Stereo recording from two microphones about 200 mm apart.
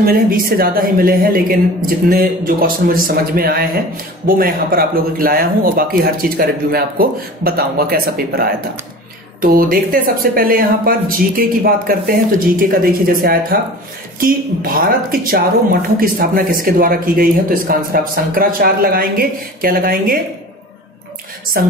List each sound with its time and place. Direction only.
0.0 s speech: 45° right (ahead or behind)
21.5 s speech: 45° right (ahead or behind)